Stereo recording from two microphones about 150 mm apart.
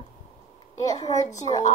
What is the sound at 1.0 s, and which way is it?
Speech, 50° left (ahead or behind).